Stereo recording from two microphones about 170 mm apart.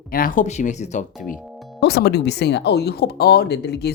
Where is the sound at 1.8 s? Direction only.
75° left (ahead or behind).